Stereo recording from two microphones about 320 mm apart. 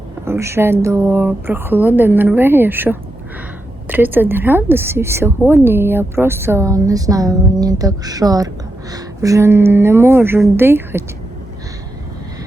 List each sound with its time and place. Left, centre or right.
0.3 s a woman's voice: centre